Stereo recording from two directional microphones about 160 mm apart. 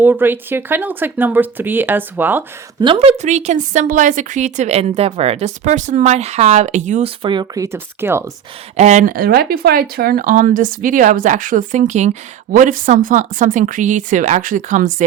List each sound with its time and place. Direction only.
0.0 s speech: 15° right (ahead or behind)
2.8 s a woman's voice: 35° right (ahead or behind)
7.2 s speech: 30° right (ahead or behind)
8.7 s speech: 45° right (ahead or behind)